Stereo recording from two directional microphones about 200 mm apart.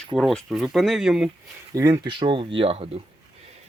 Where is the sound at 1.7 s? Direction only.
15° right (ahead or behind).